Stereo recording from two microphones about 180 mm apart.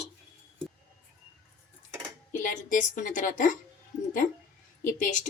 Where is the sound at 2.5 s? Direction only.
45° left (ahead or behind).